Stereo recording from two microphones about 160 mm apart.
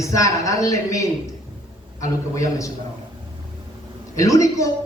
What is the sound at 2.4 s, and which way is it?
Speech, 20° left (ahead or behind).